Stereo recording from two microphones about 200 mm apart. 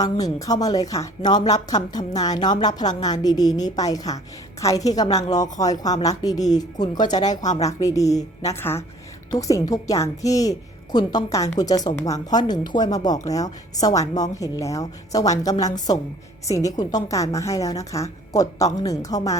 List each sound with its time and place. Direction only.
0.0 s a woman's voice: 20° left (ahead or behind)